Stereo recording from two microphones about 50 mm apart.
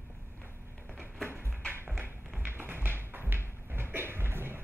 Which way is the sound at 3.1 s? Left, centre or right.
Right.